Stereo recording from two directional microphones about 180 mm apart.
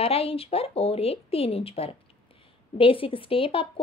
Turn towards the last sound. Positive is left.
turn(degrees=30)  # may be behind; listen again after turning